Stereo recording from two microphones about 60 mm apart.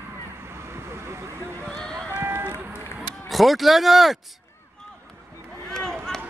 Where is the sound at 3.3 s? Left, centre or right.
Centre.